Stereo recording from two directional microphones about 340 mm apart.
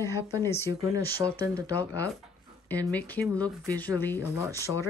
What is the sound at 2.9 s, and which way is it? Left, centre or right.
Speech, centre.